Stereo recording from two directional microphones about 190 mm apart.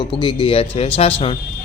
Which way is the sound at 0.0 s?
25° left (ahead or behind).